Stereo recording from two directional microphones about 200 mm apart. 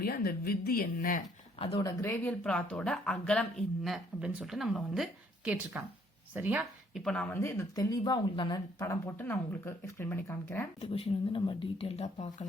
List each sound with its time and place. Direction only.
0.0 s speech: 50° left (ahead or behind)
1.5 s speech: 30° left (ahead or behind)
2.0 s speech: 15° left (ahead or behind); by 7.0 s 10° right (ahead or behind)
7.0 s speech: 5° left (ahead or behind)
10.8 s speech: 30° left (ahead or behind)